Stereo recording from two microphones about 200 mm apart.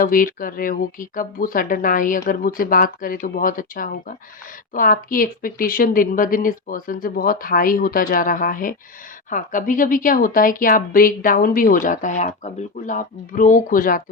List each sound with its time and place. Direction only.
0.0 s speech: 45° left (ahead or behind)